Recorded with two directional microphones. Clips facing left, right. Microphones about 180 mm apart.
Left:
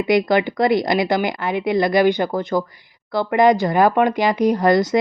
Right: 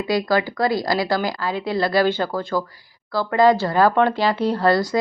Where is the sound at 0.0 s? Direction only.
20° left (ahead or behind).